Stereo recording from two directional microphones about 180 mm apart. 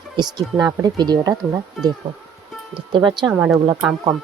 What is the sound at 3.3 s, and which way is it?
Speech, 10° right (ahead or behind).